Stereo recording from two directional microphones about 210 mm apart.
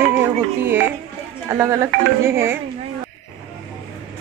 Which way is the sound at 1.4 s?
15° right (ahead or behind).